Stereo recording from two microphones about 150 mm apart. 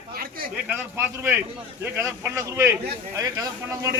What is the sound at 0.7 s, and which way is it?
A man's voice, 15° right (ahead or behind).